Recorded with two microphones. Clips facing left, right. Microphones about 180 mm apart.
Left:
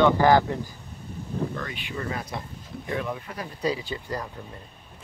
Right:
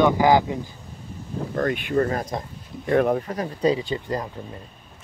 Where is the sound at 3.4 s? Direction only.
30° right (ahead or behind).